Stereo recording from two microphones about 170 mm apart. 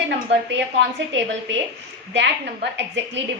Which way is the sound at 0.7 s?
90° right.